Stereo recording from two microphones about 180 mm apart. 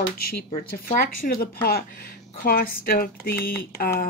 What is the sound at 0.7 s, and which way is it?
Speech, 55° left (ahead or behind).